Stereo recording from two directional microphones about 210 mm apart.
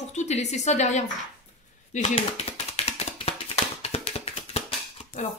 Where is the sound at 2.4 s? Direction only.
30° left (ahead or behind).